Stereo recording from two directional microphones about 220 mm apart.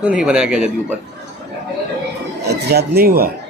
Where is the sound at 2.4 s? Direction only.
50° right (ahead or behind).